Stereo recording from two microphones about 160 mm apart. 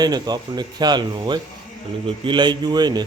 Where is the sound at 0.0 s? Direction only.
25° right (ahead or behind).